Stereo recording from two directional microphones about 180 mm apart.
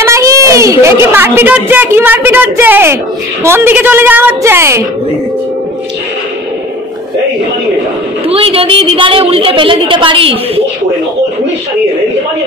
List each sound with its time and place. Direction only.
0.0 s a woman's voice: 15° right (ahead or behind)
8.3 s a woman's voice: 30° right (ahead or behind)